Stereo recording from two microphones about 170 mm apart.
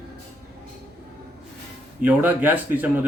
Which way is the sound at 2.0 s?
10° right (ahead or behind).